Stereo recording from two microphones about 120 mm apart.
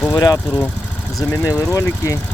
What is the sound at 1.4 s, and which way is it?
Speech, 30° left (ahead or behind).